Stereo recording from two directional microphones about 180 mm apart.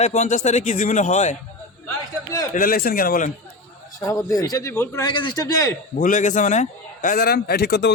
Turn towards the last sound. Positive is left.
turn(degrees=65)  # may be behind; listen again after turning